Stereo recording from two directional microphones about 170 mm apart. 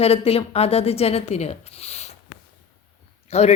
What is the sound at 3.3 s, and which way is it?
Speech, 40° left (ahead or behind).